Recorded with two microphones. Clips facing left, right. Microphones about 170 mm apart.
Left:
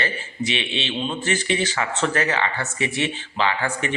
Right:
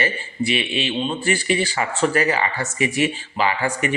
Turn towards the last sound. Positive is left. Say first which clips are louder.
# right 2 dB
turn(degrees=-10)  # may be behind; listen again after turning